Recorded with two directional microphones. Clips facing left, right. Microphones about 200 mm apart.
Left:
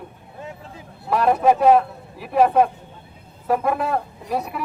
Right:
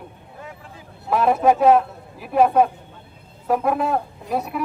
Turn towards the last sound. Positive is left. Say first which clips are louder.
# right 1 dB
turn(degrees=0)  # may be behind; listen again after turning